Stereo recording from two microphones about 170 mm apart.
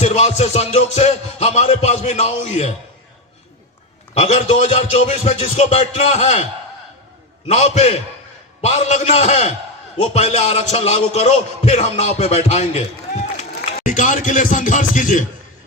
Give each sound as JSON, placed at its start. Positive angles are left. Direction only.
{"t": 0.0, "sound": "a man's voice", "side_deg": 40}
{"t": 4.2, "sound": "a man's voice", "side_deg": 40}
{"t": 13.8, "sound": "a man's voice", "side_deg": 50}